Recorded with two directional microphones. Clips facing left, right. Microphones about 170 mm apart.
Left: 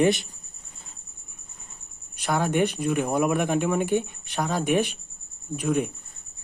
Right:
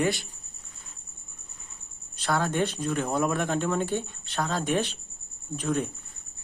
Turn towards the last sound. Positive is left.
turn(degrees=10)  # may be behind; listen again after turning